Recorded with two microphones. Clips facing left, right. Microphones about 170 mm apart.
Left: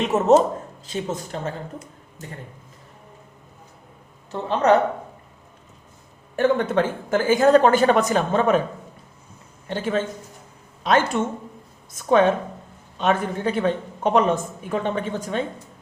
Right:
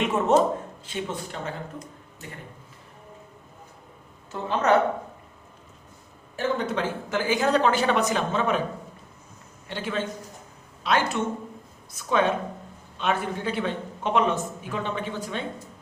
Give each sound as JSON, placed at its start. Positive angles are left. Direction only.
{"t": 0.0, "sound": "speech", "side_deg": 40}
{"t": 4.3, "sound": "speech", "side_deg": 35}
{"t": 6.3, "sound": "speech", "side_deg": 55}
{"t": 9.6, "sound": "speech", "side_deg": 45}